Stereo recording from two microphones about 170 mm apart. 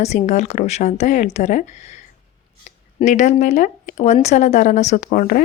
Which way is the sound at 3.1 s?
45° left (ahead or behind).